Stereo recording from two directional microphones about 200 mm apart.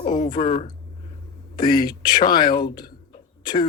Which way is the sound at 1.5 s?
20° left (ahead or behind).